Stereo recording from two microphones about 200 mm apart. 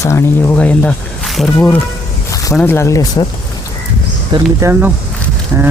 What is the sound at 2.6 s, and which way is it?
Speech, 10° left (ahead or behind).